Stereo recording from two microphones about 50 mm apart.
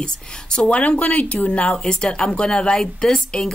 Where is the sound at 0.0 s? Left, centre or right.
Centre.